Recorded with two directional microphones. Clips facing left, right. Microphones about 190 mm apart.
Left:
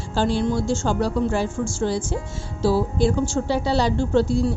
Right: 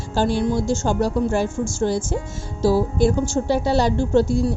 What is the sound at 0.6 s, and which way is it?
A woman's voice, 40° right (ahead or behind).